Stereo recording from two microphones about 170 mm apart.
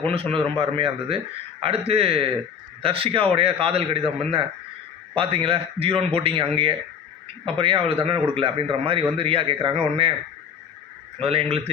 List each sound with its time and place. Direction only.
0.1 s a man's voice: 35° right (ahead or behind)
11.2 s a man's voice: 35° right (ahead or behind)